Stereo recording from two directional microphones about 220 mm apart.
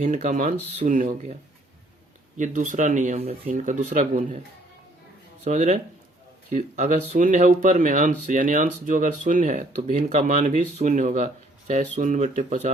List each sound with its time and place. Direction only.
0.0 s speech: 35° right (ahead or behind)
2.4 s speech: 35° right (ahead or behind)
5.5 s speech: 35° right (ahead or behind)